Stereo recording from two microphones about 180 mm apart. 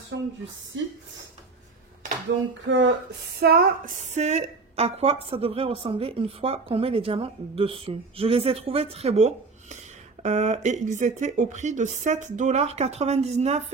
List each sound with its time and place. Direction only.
0.1 s speech: 90° right
2.6 s speech: 90° right
3.3 s speech: 55° right (ahead or behind)
4.1 s a woman's voice: 40° right (ahead or behind)